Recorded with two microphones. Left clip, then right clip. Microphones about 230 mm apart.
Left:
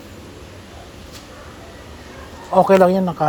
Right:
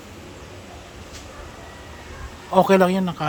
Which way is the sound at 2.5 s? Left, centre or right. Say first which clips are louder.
Left 4 dB; right.